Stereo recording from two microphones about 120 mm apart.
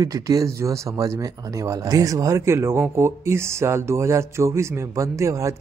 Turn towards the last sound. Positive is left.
turn(degrees=-25)  # may be behind; listen again after turning